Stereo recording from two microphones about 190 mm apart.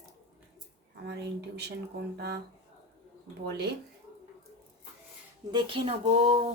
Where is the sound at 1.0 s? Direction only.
60° right (ahead or behind).